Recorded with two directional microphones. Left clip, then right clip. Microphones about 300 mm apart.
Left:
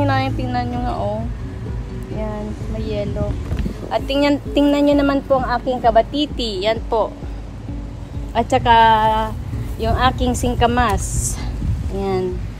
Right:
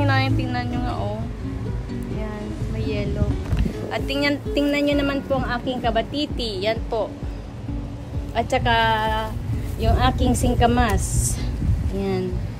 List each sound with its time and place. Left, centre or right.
0.0 s music: centre
2.8 s speech: centre
8.4 s a woman's voice: left